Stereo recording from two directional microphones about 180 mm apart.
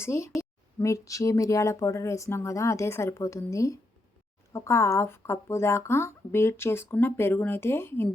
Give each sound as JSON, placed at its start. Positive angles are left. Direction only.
{"t": 0.0, "sound": "speech", "side_deg": 15}